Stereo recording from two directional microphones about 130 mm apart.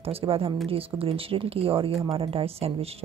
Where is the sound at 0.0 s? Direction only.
45° right (ahead or behind).